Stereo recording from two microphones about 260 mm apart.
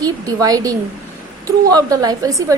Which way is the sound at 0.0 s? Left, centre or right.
Centre.